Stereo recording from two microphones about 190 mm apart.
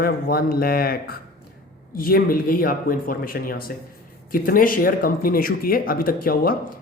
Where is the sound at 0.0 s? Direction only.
50° left (ahead or behind).